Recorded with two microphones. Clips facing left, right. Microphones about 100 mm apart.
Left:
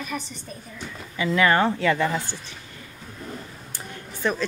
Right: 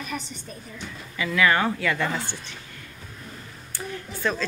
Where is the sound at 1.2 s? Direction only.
30° left (ahead or behind).